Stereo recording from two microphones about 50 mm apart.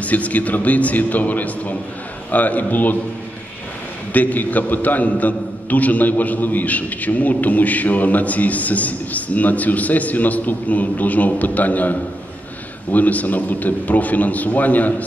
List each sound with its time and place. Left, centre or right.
0.0 s a man's voice: left
4.1 s a man's voice: left